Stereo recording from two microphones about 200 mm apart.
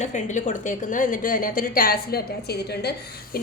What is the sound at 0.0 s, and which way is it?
A woman's voice, 35° left (ahead or behind).